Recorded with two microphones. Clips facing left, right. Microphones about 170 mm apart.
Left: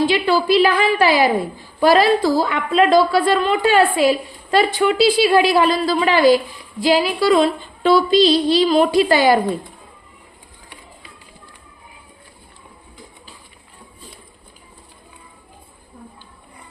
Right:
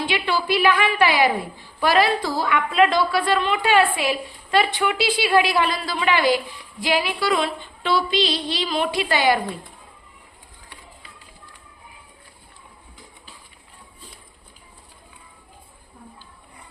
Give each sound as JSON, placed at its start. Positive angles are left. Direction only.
{"t": 0.0, "sound": "a woman's voice", "side_deg": 40}